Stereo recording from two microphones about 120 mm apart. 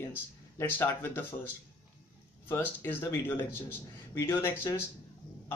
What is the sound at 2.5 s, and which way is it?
Speech, 20° left (ahead or behind).